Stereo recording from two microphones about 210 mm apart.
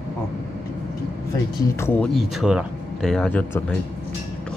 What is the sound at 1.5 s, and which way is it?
Speech, 15° left (ahead or behind).